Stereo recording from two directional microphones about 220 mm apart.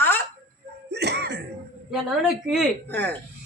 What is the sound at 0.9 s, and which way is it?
Speech, 50° right (ahead or behind).